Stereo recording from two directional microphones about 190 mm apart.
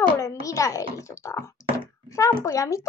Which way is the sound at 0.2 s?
15° left (ahead or behind).